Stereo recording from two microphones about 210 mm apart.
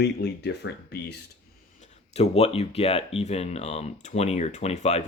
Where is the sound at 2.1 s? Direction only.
30° left (ahead or behind).